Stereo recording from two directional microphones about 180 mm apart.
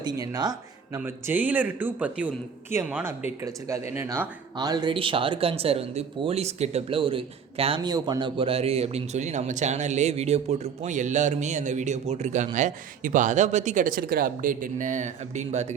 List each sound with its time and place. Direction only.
0.0 s speech: 20° right (ahead or behind)
0.9 s a man's voice: 10° right (ahead or behind); by 15.6 s 40° right (ahead or behind)